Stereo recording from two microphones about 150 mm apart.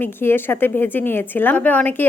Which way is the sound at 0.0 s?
15° left (ahead or behind).